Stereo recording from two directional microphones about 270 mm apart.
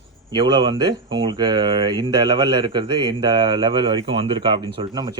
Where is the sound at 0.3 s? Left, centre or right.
Centre.